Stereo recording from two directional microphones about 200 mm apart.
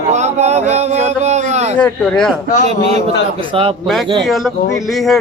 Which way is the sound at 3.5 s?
25° right (ahead or behind).